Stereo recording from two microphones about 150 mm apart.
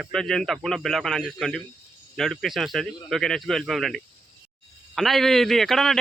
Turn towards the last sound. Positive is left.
turn(degrees=0)  # may be behind; listen again after turning